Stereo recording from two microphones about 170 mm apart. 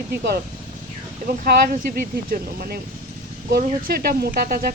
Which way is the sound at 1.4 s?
55° right (ahead or behind).